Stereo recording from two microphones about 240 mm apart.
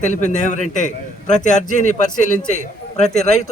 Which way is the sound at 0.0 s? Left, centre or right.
Left.